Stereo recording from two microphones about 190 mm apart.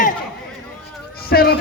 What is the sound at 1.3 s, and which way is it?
Speech, 55° left (ahead or behind).